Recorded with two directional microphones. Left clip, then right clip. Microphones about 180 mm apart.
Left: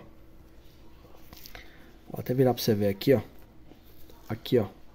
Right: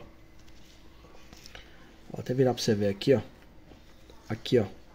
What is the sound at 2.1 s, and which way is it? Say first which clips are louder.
Speech: left 1 dB; 15° left (ahead or behind).